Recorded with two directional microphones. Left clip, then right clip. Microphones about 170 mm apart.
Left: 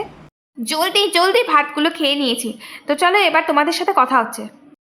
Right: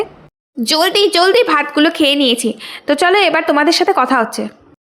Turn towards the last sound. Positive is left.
turn(degrees=-30)  # may be behind; listen again after turning